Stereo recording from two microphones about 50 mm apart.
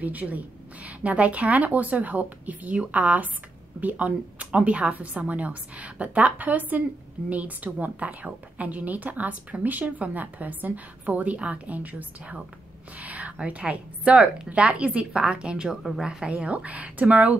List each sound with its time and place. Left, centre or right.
0.0 s a woman's voice: right; by 16.3 s centre
16.3 s a woman's voice: right